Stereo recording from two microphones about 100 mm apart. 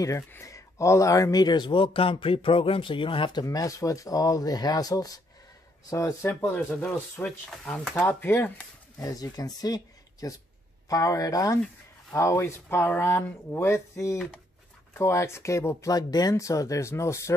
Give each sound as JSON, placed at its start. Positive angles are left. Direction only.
{"t": 0.3, "sound": "speech", "side_deg": 30}
{"t": 3.4, "sound": "speech", "side_deg": 35}
{"t": 6.5, "sound": "speech", "side_deg": 15}
{"t": 8.1, "sound": "speech", "side_deg": 25}
{"t": 8.9, "sound": "speech", "side_deg": 40}
{"t": 15.9, "sound": "speech", "side_deg": 40}